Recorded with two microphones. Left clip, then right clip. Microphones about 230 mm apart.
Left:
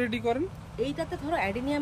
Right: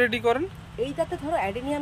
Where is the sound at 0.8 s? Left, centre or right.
Right.